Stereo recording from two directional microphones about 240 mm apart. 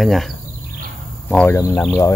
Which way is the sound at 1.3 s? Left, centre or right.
Centre.